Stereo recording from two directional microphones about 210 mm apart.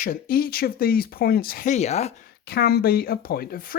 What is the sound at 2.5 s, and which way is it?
Speech, 50° left (ahead or behind).